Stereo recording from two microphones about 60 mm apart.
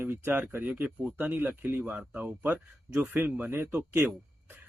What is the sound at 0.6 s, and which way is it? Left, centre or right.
Speech, right.